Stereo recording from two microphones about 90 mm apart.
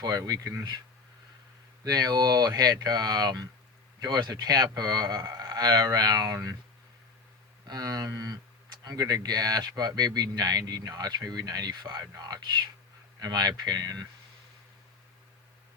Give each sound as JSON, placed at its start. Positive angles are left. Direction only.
{"t": 0.0, "sound": "speech", "side_deg": -45}
{"t": 1.8, "sound": "speech", "side_deg": -45}
{"t": 7.7, "sound": "speech", "side_deg": -45}